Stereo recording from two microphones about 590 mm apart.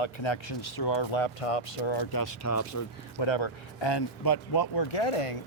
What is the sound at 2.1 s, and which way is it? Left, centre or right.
Speech, left.